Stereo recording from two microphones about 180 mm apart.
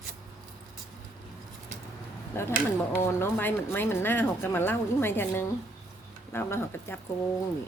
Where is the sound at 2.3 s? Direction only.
15° left (ahead or behind).